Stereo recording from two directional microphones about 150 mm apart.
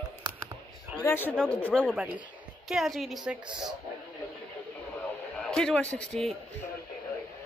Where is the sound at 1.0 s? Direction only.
15° left (ahead or behind); by 3.4 s 5° right (ahead or behind).